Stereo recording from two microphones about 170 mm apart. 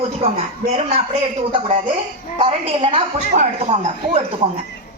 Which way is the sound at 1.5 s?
30° right (ahead or behind).